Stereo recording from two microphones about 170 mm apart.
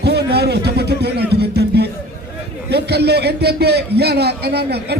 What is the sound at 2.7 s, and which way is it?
A man's voice, 75° right (ahead or behind).